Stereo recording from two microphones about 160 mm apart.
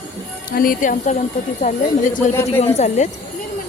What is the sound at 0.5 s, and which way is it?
A woman's voice, 60° left (ahead or behind).